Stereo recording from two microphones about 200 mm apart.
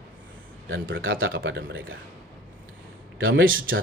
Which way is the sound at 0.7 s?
80° right.